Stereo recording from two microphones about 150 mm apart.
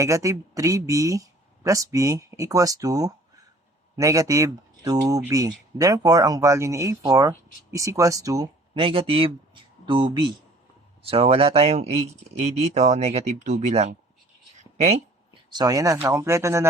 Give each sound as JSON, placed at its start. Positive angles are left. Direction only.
{"t": 0.0, "sound": "speech", "side_deg": -20}
{"t": 8.7, "sound": "speech", "side_deg": -35}
{"t": 14.5, "sound": "a sound", "side_deg": -50}
{"t": 15.4, "sound": "speech", "side_deg": -25}